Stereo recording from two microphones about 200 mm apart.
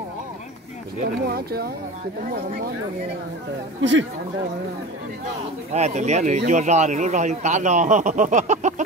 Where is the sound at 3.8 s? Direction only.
65° right (ahead or behind).